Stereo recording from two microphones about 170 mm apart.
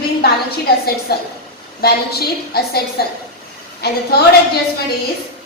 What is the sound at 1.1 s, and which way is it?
A woman's voice, 65° left (ahead or behind).